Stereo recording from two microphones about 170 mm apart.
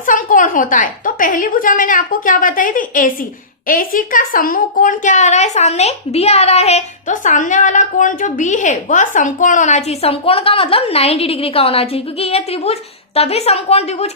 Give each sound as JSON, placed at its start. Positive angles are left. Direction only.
{"t": 0.0, "sound": "a woman's voice", "side_deg": 50}